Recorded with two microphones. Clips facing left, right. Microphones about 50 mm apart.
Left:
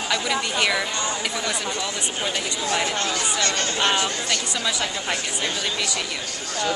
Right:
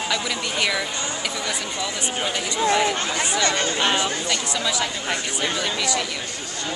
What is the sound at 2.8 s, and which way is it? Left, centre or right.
Speech, centre.